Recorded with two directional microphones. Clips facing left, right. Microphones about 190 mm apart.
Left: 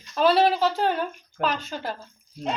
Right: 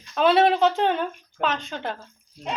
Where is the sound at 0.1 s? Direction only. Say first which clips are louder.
Right 1 dB; centre (ahead or behind).